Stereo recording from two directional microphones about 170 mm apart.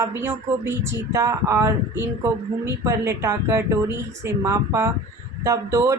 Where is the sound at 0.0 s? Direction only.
15° right (ahead or behind).